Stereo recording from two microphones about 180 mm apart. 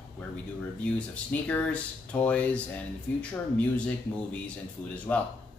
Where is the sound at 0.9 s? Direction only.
5° left (ahead or behind).